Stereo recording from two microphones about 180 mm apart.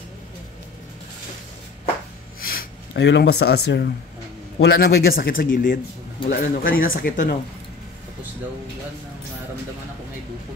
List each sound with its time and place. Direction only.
2.4 s a man's voice: 65° left (ahead or behind)